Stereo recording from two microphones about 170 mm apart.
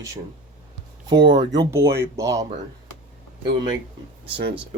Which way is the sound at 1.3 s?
25° right (ahead or behind).